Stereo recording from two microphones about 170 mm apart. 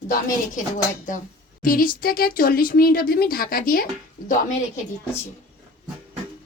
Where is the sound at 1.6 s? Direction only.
55° left (ahead or behind).